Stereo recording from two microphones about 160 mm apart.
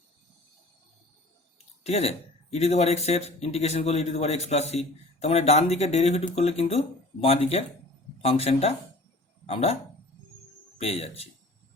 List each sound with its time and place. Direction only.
1.9 s speech: 40° left (ahead or behind)
10.8 s speech: 40° left (ahead or behind)